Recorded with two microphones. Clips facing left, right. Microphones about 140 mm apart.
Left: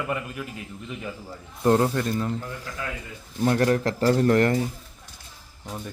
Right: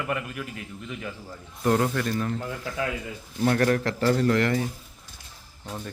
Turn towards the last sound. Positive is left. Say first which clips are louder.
# left 3 dB
turn(degrees=35)  # may be behind; listen again after turning